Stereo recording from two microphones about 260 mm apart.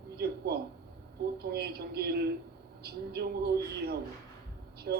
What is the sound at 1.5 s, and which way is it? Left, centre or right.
Speech, right.